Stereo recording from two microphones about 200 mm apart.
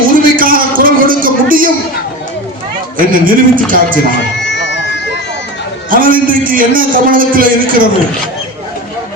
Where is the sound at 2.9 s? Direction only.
45° right (ahead or behind).